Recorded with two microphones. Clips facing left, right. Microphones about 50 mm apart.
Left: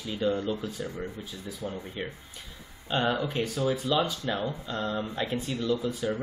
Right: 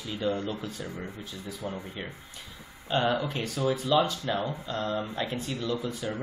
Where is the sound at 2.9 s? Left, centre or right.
Centre.